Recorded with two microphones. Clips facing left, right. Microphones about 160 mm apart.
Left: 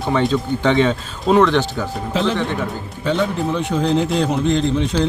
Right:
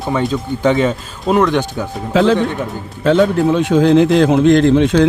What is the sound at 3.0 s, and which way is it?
Speech, 85° right.